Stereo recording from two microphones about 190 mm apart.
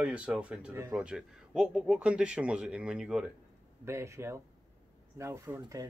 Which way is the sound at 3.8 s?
15° right (ahead or behind).